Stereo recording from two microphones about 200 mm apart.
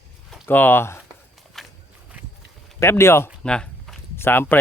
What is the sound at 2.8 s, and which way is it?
Speech, 15° left (ahead or behind).